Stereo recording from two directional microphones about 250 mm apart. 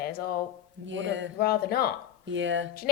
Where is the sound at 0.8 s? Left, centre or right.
Right.